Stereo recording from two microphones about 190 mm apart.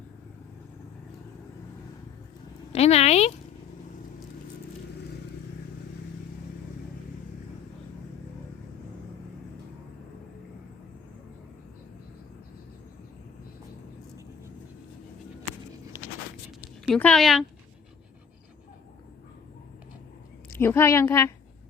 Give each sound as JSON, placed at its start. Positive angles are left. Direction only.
{"t": 2.7, "sound": "speech", "side_deg": 35}
{"t": 16.8, "sound": "speech", "side_deg": 5}
{"t": 20.6, "sound": "a woman's voice", "side_deg": 15}